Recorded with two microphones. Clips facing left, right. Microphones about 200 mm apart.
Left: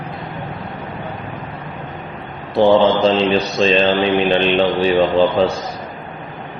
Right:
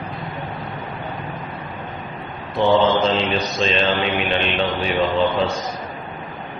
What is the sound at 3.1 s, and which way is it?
Mantra, 35° left (ahead or behind).